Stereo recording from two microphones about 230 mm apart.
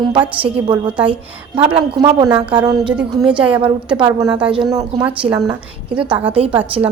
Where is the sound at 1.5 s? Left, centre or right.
Right.